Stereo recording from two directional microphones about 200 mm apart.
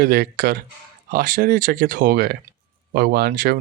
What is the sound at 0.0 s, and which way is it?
Speech, 45° right (ahead or behind).